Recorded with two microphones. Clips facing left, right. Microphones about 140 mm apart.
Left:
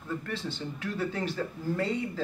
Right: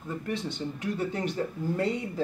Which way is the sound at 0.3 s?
20° right (ahead or behind).